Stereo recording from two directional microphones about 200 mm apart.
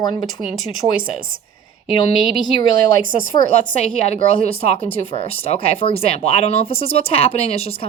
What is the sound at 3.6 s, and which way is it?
A woman's voice, 30° left (ahead or behind).